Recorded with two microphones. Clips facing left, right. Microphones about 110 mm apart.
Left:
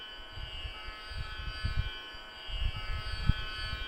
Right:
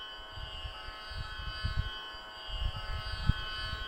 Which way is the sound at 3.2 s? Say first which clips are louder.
Even; 15° right (ahead or behind).